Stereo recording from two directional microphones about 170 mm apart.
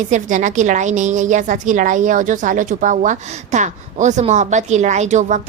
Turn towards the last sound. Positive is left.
turn(degrees=-45)  # may be behind; listen again after turning